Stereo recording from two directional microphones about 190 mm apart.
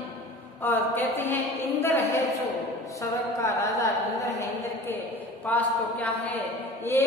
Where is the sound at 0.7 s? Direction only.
10° left (ahead or behind).